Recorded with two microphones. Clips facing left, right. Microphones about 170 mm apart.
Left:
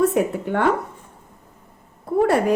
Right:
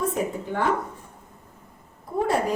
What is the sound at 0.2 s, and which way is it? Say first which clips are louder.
Speech: left 7 dB; 65° left (ahead or behind).